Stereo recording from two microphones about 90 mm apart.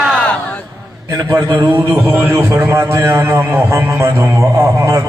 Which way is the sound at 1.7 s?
25° right (ahead or behind).